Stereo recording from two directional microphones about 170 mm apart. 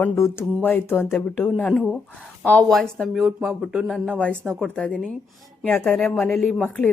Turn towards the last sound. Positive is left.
turn(degrees=10)  # may be behind; listen again after turning